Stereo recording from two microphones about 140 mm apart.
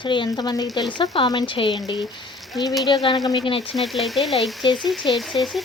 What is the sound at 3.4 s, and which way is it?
Speech, 40° left (ahead or behind).